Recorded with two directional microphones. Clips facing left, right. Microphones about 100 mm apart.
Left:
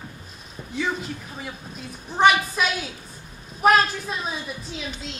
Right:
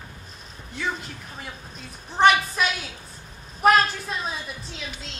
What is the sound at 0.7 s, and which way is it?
A woman's voice, centre (ahead or behind).